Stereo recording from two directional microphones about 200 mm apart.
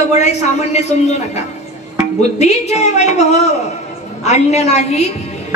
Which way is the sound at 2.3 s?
35° left (ahead or behind).